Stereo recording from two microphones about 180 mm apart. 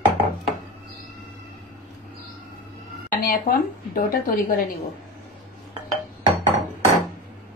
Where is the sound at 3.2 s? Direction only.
50° left (ahead or behind).